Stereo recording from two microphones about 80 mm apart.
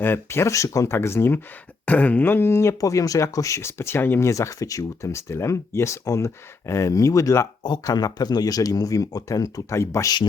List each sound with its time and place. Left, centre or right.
0.0 s speech: left
1.8 s speech: centre
2.8 s speech: left
7.6 s speech: left